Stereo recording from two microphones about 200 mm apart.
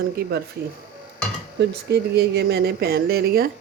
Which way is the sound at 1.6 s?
55° right (ahead or behind).